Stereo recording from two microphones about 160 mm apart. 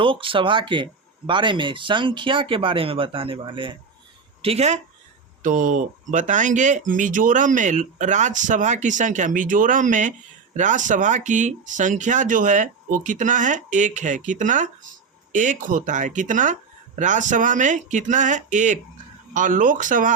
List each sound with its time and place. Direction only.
0.0 s speech: 35° right (ahead or behind)
4.4 s speech: 45° right (ahead or behind)
5.4 s speech: 55° right (ahead or behind)